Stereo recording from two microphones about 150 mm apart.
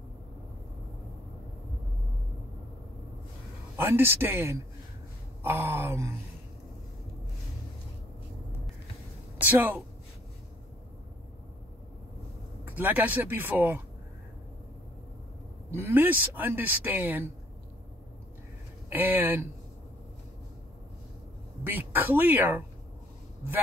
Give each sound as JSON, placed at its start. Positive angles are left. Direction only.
{"t": 3.7, "sound": "speech", "side_deg": -15}
{"t": 9.4, "sound": "speech", "side_deg": -10}
{"t": 12.6, "sound": "speech", "side_deg": -10}
{"t": 15.7, "sound": "speech", "side_deg": -15}
{"t": 18.9, "sound": "speech", "side_deg": -10}
{"t": 21.6, "sound": "speech", "side_deg": -15}